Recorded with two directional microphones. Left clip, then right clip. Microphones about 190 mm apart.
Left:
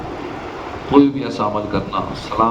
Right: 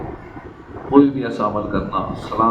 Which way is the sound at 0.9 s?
45° left (ahead or behind).